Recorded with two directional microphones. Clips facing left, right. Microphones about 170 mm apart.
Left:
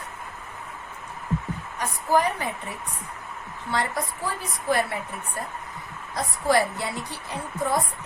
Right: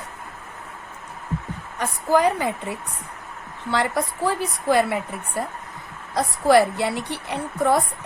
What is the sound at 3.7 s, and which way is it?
A woman's voice, 80° right.